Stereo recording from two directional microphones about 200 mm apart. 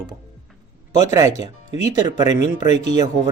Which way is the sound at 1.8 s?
20° right (ahead or behind).